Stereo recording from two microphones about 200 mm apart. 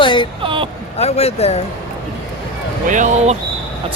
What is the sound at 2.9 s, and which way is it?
Speech, 40° right (ahead or behind).